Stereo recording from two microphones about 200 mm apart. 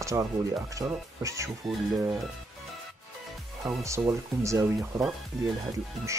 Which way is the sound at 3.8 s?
15° right (ahead or behind).